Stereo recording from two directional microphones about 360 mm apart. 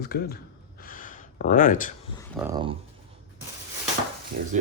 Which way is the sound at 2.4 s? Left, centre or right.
Centre.